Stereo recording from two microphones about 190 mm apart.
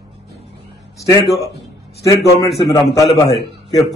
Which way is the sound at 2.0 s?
15° left (ahead or behind).